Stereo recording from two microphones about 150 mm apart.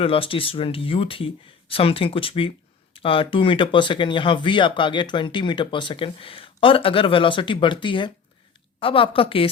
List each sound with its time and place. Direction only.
0.0 s speech: 40° left (ahead or behind)